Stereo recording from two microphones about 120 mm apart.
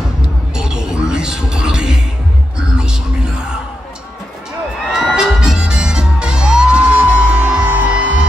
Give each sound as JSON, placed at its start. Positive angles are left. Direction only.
{"t": 0.6, "sound": "music", "side_deg": -5}
{"t": 4.8, "sound": "music", "side_deg": 0}